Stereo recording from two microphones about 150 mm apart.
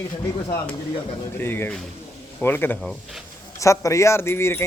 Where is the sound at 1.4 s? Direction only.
15° left (ahead or behind).